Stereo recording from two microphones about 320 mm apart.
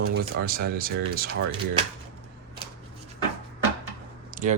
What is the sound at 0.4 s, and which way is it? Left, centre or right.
Speech, right.